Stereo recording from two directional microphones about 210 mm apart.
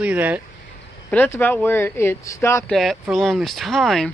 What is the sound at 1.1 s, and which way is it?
Speech, 10° left (ahead or behind).